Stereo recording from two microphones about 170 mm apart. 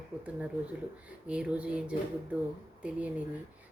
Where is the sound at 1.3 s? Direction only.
5° right (ahead or behind).